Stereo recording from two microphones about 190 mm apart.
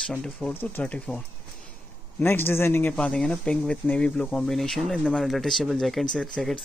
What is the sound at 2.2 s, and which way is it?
Speech, 10° left (ahead or behind).